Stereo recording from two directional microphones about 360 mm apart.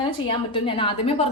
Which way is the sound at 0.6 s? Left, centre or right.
Centre.